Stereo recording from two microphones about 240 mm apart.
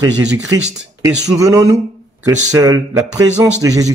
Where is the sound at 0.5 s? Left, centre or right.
Centre.